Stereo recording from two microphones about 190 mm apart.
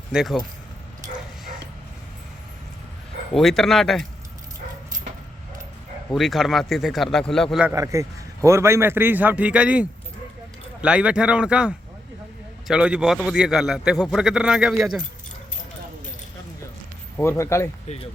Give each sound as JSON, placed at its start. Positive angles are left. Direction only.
{"t": 0.1, "sound": "a man's voice", "side_deg": 0}
{"t": 3.3, "sound": "a man's voice", "side_deg": 0}
{"t": 6.1, "sound": "a man's voice", "side_deg": 0}
{"t": 7.6, "sound": "a man's voice", "side_deg": -15}
{"t": 17.2, "sound": "speech", "side_deg": 15}